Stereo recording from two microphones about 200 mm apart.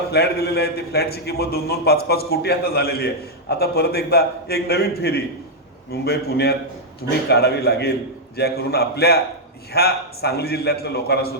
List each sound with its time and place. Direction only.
0.1 s a man's voice: 55° left (ahead or behind)